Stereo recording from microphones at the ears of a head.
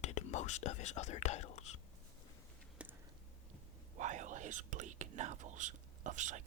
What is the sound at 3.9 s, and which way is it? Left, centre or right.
Speech, right.